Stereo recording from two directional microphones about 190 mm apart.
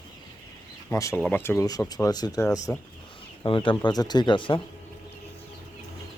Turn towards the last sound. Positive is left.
turn(degrees=25)  # may be behind; listen again after turning